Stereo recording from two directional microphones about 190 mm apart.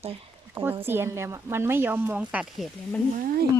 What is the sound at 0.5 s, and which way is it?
Speech, 10° right (ahead or behind).